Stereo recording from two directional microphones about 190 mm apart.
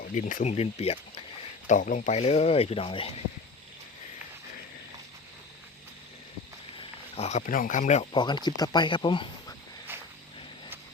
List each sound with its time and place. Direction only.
0.0 s speech: 40° left (ahead or behind)
1.6 s speech: 45° left (ahead or behind)
6.7 s speech: 35° left (ahead or behind)
8.1 s speech: 25° left (ahead or behind)
9.9 s a sound: 10° right (ahead or behind)